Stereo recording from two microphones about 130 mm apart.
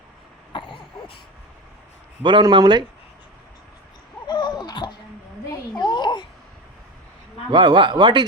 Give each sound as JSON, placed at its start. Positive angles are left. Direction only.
{"t": 0.5, "sound": "throat clearing", "side_deg": 40}
{"t": 2.2, "sound": "a man's voice", "side_deg": -35}
{"t": 4.3, "sound": "a sound", "side_deg": 35}
{"t": 7.5, "sound": "a man's voice", "side_deg": -35}